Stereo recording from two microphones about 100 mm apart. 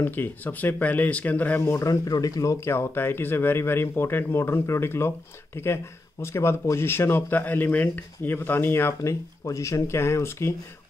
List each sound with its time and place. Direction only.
0.0 s speech: 20° left (ahead or behind)
1.6 s speech: 30° left (ahead or behind)
6.2 s speech: 25° left (ahead or behind)